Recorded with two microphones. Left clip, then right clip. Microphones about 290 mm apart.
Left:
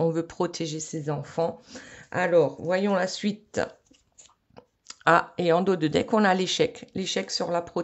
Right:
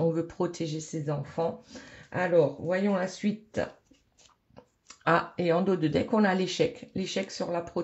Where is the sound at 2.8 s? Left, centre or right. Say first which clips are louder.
Left 4 dB; left.